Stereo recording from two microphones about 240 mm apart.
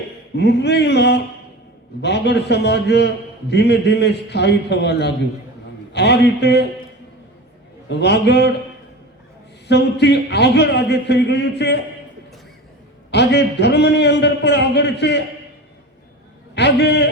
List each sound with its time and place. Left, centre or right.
0.3 s a man's voice: left
7.9 s a man's voice: left
9.6 s a man's voice: left
13.1 s a man's voice: left
16.6 s a man's voice: left